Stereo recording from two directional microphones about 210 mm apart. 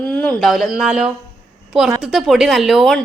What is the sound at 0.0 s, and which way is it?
A woman's voice, 5° left (ahead or behind).